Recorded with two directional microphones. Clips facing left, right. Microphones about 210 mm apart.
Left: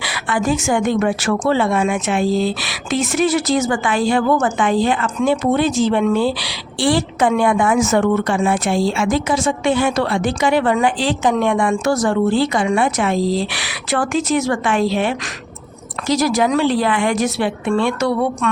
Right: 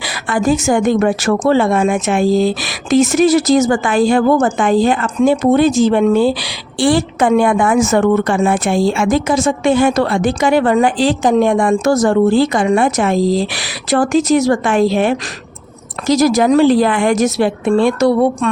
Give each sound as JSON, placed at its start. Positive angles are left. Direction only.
{"t": 0.0, "sound": "a woman's voice", "side_deg": -40}